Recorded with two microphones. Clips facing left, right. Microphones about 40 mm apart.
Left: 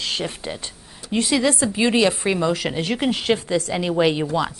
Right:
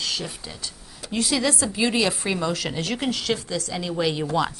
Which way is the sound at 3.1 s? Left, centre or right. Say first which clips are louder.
Left 6 dB; left.